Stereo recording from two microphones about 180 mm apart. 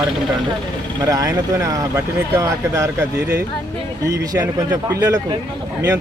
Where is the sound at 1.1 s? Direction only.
20° right (ahead or behind).